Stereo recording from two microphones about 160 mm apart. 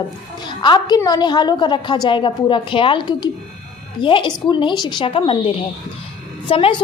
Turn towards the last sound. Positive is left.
turn(degrees=35)  # may be behind; listen again after turning